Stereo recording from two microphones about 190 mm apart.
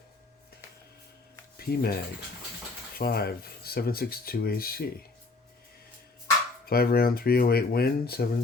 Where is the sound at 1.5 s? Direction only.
55° left (ahead or behind).